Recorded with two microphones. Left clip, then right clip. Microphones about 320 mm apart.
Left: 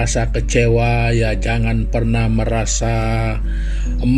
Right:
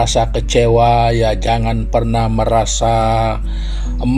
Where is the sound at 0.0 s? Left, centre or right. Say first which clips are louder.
Right 6 dB; right.